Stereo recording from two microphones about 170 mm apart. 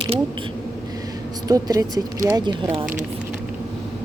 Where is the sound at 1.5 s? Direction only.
20° right (ahead or behind).